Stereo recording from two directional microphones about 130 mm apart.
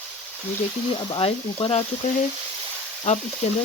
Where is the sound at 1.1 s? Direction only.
45° left (ahead or behind).